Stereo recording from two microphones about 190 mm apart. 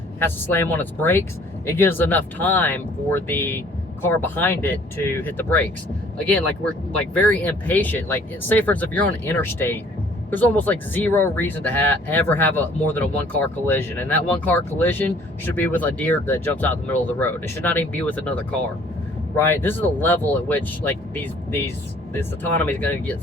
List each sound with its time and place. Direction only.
0.2 s speech: 10° left (ahead or behind)
19.4 s speech: 10° left (ahead or behind)